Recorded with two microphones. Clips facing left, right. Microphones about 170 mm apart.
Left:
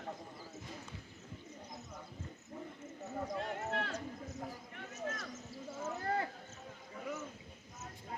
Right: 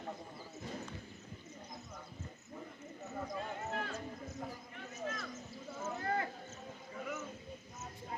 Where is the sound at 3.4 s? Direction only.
70° left (ahead or behind).